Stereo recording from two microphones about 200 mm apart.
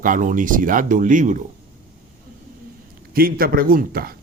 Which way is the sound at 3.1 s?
45° right (ahead or behind).